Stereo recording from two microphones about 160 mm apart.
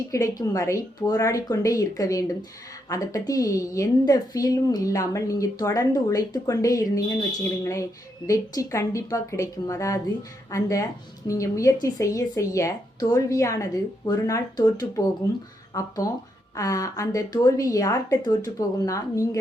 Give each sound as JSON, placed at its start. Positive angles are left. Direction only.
{"t": 0.1, "sound": "a woman's voice", "side_deg": 20}